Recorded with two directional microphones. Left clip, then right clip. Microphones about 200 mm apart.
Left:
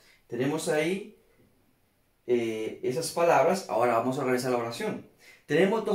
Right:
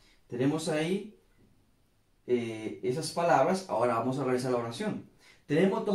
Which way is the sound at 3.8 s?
15° left (ahead or behind).